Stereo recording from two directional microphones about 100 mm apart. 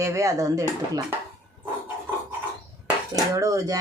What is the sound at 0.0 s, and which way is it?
Speech, 30° right (ahead or behind).